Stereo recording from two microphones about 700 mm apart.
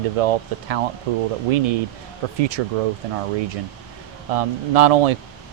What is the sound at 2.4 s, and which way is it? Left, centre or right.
Speech, right.